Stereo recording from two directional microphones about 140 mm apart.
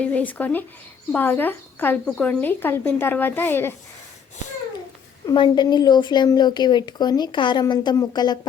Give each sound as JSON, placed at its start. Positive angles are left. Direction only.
{"t": 0.0, "sound": "a woman's voice", "side_deg": 10}
{"t": 5.2, "sound": "a woman's voice", "side_deg": 30}